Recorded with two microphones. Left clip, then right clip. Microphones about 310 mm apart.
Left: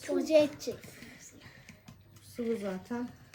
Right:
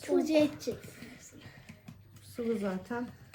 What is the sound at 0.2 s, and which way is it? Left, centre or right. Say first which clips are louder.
Speech: left 4 dB; centre.